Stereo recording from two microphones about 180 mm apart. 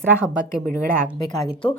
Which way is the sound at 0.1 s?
5° right (ahead or behind).